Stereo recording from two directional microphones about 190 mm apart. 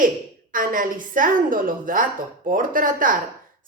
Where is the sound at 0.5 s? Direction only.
45° right (ahead or behind).